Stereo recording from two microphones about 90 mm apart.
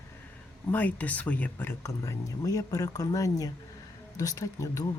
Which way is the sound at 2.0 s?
40° left (ahead or behind).